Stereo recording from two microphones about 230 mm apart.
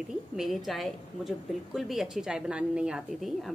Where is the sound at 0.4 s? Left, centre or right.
Centre.